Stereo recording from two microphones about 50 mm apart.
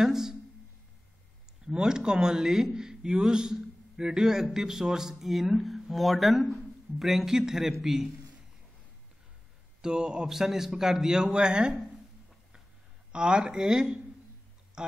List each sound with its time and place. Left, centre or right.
0.0 s a sound: centre
1.7 s a man's voice: centre
9.8 s a man's voice: centre
13.1 s speech: centre